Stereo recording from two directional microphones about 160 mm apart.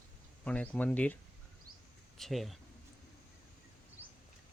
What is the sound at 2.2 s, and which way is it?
Speech, centre (ahead or behind).